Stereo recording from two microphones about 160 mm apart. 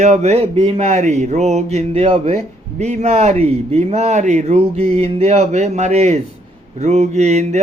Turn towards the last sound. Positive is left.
turn(degrees=-45)  # may be behind; listen again after turning